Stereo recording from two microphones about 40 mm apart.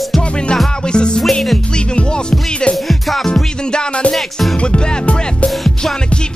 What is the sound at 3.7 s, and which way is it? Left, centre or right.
Music, left.